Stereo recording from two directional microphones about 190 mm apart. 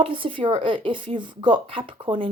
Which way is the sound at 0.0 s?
25° right (ahead or behind).